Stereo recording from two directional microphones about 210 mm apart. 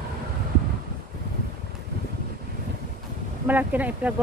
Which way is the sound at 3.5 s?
10° right (ahead or behind).